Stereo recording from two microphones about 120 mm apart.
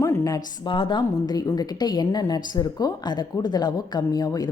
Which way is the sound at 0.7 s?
40° left (ahead or behind).